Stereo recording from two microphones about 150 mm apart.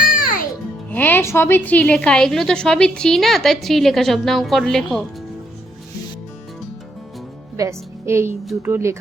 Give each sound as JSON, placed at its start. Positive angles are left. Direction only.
{"t": 0.0, "sound": "music", "side_deg": 70}
{"t": 0.9, "sound": "a woman's voice", "side_deg": 10}
{"t": 7.5, "sound": "a woman's voice", "side_deg": -20}